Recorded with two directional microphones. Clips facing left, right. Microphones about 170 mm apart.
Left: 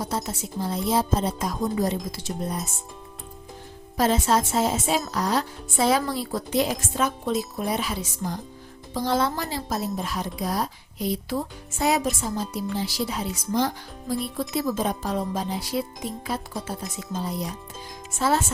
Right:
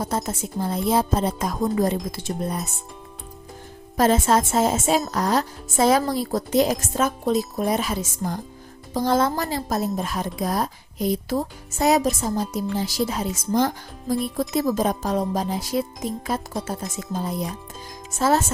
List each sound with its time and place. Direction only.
0.0 s a woman's voice: 50° right (ahead or behind)
3.9 s a woman's voice: 50° right (ahead or behind)